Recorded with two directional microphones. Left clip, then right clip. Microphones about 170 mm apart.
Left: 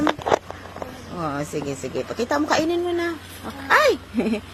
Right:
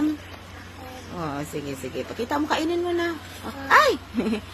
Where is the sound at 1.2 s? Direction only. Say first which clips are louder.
Left 4 dB; 10° left (ahead or behind).